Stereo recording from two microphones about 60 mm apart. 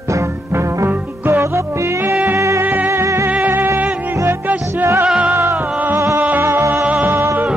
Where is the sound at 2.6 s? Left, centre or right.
Right.